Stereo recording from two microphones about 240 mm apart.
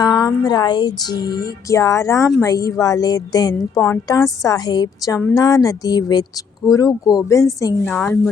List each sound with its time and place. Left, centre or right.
0.0 s a woman's voice: centre